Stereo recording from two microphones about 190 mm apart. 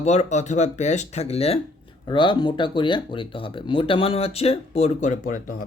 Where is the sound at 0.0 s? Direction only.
35° left (ahead or behind).